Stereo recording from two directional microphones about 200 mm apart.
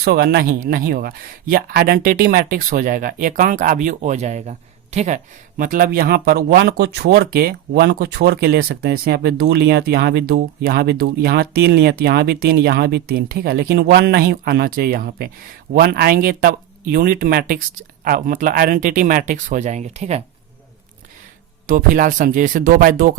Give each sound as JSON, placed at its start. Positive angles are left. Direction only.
{"t": 0.0, "sound": "speech", "side_deg": -50}
{"t": 21.7, "sound": "speech", "side_deg": -40}